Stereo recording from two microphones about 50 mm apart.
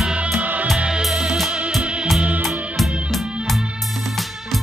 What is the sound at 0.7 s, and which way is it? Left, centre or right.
Music, centre.